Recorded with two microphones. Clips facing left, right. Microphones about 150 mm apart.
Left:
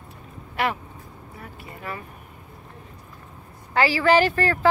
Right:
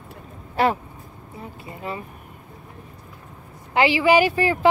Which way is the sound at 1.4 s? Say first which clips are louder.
Right 4 dB; 25° right (ahead or behind).